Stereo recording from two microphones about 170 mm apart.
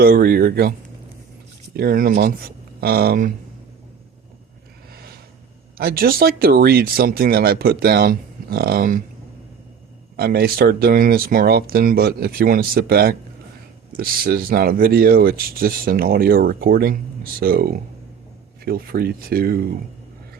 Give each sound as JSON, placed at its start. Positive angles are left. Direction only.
{"t": 0.0, "sound": "speech", "side_deg": -65}
{"t": 1.7, "sound": "speech", "side_deg": -65}
{"t": 4.9, "sound": "a sound", "side_deg": -65}
{"t": 5.7, "sound": "speech", "side_deg": -60}
{"t": 10.2, "sound": "speech", "side_deg": -65}